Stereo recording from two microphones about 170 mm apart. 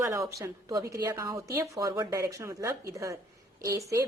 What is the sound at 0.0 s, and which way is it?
A woman's voice, 15° right (ahead or behind).